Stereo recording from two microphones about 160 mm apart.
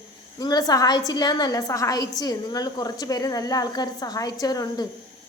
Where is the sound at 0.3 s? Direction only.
25° left (ahead or behind).